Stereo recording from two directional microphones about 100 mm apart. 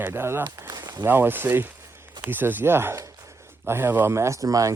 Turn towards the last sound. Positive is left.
turn(degrees=-35)  # may be behind; listen again after turning